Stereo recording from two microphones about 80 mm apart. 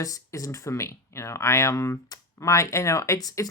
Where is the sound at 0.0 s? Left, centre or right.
Left.